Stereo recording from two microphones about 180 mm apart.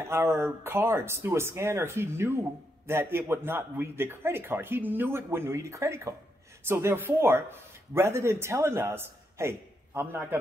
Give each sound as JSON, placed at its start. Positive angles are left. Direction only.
{"t": 0.1, "sound": "a man's voice", "side_deg": -15}